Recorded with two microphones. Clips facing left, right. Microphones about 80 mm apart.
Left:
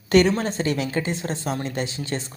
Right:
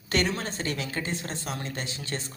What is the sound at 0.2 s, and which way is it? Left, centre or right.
Speech, left.